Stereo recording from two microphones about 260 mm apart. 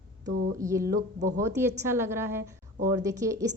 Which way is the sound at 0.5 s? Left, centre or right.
Centre.